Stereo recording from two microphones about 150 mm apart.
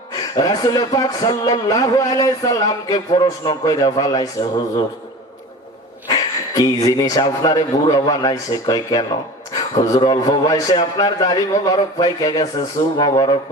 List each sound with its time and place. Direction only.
0.1 s speech: 25° left (ahead or behind)
6.1 s speech: 25° left (ahead or behind)